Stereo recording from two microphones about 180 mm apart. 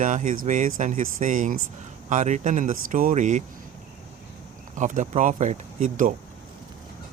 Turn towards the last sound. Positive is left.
turn(degrees=-45)  # may be behind; listen again after turning